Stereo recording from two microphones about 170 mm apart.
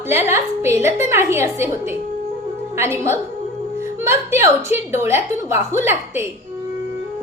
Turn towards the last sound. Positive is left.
turn(degrees=-15)  # may be behind; listen again after turning